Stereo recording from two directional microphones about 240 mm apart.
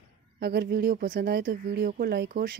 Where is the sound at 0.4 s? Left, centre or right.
Right.